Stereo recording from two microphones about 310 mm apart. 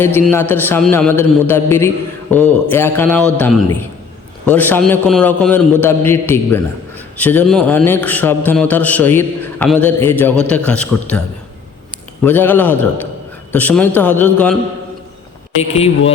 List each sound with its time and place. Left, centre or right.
0.0 s a man's voice: centre
4.4 s a man's voice: centre
12.2 s a man's voice: centre
15.7 s a man's voice: centre